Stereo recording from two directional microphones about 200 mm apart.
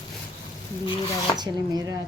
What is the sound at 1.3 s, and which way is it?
Speech, 20° right (ahead or behind).